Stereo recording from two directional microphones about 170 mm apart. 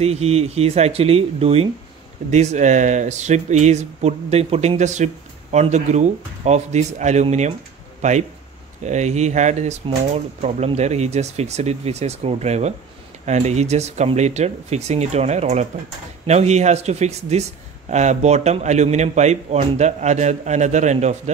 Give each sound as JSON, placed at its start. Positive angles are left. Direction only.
{"t": 0.0, "sound": "speech", "side_deg": -40}